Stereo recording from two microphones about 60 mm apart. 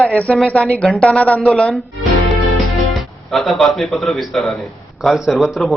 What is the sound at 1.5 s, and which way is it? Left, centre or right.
Speech, centre.